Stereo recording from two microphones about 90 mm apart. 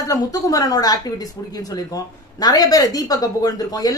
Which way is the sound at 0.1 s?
40° left (ahead or behind).